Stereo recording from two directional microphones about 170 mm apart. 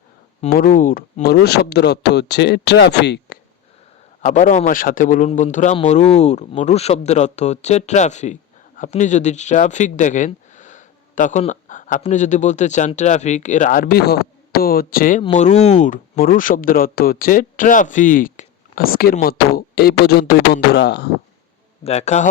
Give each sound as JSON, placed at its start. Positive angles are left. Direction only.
{"t": 0.5, "sound": "speech", "side_deg": 55}
{"t": 4.2, "sound": "speech", "side_deg": 45}
{"t": 15.3, "sound": "speech", "side_deg": 45}
{"t": 21.8, "sound": "speech", "side_deg": 40}